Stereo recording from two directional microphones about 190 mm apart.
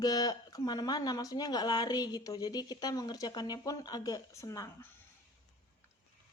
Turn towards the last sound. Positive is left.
turn(degrees=15)  # may be behind; listen again after turning